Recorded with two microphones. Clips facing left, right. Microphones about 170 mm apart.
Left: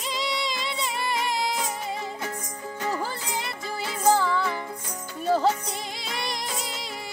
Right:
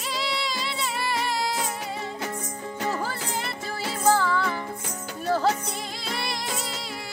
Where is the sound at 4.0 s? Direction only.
15° left (ahead or behind).